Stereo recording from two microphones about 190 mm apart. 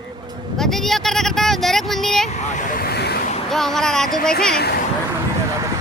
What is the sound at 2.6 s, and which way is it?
Vehicle, 50° left (ahead or behind).